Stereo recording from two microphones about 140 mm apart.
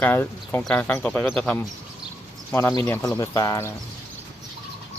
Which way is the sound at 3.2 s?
25° left (ahead or behind).